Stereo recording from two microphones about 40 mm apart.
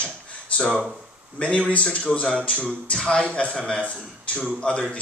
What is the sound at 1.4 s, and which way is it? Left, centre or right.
Speech, left.